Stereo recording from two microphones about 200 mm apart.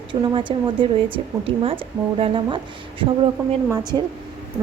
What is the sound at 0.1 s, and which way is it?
Speech, 25° right (ahead or behind).